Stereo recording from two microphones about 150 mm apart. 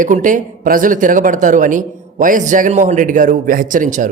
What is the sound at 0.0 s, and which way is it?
A man's voice, 60° right (ahead or behind).